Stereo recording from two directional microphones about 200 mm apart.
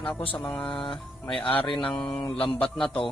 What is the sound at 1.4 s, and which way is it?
Speech, 25° left (ahead or behind).